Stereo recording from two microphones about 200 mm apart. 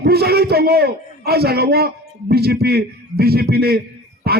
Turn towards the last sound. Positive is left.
turn(degrees=-50)  # may be behind; listen again after turning